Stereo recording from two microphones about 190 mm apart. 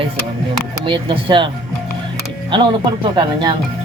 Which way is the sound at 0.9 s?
25° right (ahead or behind).